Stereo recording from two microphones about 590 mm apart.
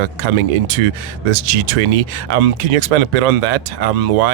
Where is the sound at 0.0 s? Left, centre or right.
Right.